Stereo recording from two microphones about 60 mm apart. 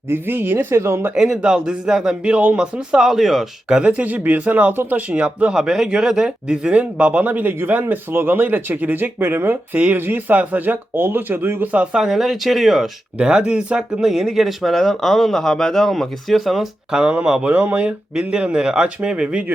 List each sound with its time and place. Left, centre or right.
0.1 s speech: right
1.1 s speech: centre
3.7 s a man's voice: centre; by 9.6 s right
9.7 s a man's voice: right
11.7 s a man's voice: right
11.9 s speech: centre
13.1 s speech: centre